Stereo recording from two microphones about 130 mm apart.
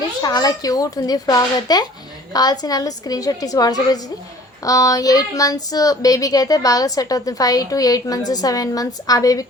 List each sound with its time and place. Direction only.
0.2 s speech: 30° left (ahead or behind)